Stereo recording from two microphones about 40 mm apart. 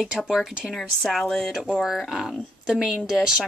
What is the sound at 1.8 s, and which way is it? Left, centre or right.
Speech, centre.